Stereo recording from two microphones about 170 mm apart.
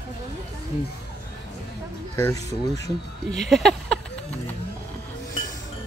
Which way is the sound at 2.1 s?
20° left (ahead or behind).